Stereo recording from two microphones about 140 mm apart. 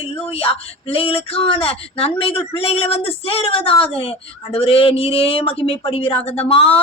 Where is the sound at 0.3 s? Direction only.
45° left (ahead or behind).